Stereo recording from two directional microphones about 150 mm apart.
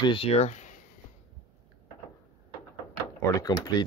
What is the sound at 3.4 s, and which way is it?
Speech, 25° left (ahead or behind).